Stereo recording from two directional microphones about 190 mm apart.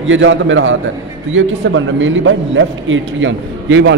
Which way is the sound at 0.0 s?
85° right.